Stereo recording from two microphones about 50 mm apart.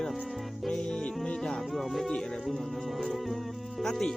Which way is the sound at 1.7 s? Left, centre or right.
Centre.